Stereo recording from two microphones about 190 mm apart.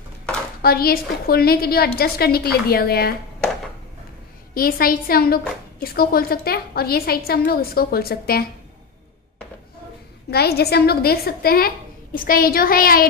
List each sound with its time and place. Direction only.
0.6 s a woman's voice: 50° left (ahead or behind)
4.6 s a woman's voice: 50° left (ahead or behind)
10.3 s a woman's voice: 55° left (ahead or behind)